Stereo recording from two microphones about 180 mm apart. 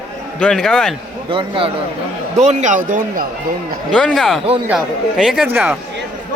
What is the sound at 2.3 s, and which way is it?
Speech, 40° right (ahead or behind).